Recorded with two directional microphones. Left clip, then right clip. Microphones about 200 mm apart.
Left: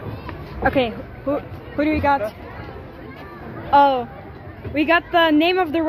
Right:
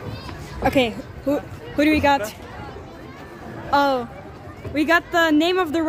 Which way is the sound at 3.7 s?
25° right (ahead or behind).